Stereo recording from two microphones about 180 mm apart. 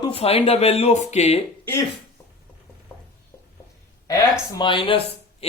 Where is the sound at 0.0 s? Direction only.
30° left (ahead or behind).